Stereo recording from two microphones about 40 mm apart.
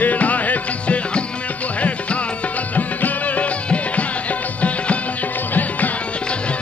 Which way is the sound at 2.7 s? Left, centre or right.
Left.